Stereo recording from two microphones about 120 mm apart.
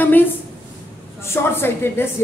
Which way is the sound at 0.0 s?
15° left (ahead or behind).